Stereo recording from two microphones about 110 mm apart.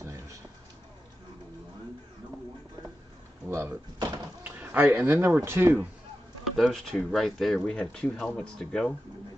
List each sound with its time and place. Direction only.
0.0 s a sound: 30° right (ahead or behind)
3.4 s speech: 25° right (ahead or behind)
6.4 s speech: 5° left (ahead or behind)